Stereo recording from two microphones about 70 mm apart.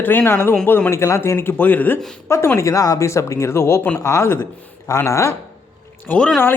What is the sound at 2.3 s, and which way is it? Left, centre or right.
Speech, left.